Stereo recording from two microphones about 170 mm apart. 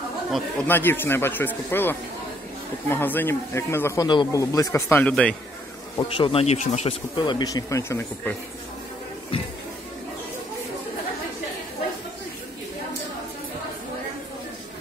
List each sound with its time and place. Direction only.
0.7 s speech: 10° left (ahead or behind)
5.9 s speech: 30° left (ahead or behind)